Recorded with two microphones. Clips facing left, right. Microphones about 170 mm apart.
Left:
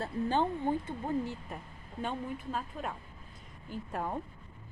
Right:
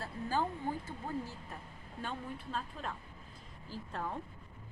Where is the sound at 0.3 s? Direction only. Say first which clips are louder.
Left 4 dB; 25° left (ahead or behind).